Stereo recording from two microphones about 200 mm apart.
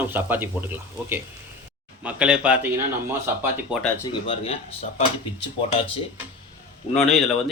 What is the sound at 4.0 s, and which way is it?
Speech, 25° left (ahead or behind).